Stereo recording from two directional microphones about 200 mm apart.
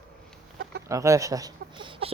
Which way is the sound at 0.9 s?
15° right (ahead or behind).